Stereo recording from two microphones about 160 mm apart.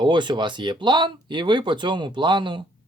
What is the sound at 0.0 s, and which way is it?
Speech, 30° right (ahead or behind).